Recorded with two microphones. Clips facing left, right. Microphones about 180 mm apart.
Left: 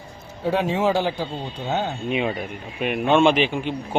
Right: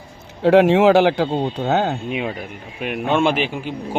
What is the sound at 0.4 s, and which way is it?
Speech, 80° right.